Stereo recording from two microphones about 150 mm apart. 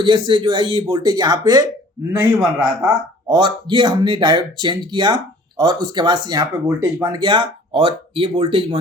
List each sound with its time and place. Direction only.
0.0 s a man's voice: 30° right (ahead or behind)